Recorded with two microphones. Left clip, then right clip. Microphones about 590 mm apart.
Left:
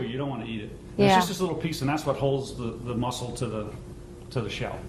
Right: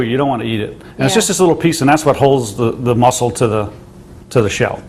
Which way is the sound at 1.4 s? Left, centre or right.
Right.